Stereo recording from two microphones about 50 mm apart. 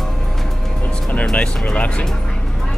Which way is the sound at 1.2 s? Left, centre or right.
Centre.